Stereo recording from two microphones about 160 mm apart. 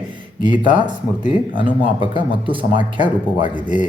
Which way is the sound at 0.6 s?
30° right (ahead or behind).